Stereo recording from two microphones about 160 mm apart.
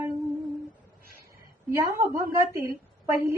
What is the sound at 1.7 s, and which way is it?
Speech, 20° right (ahead or behind).